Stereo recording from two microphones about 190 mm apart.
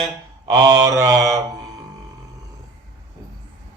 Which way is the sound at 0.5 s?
15° right (ahead or behind).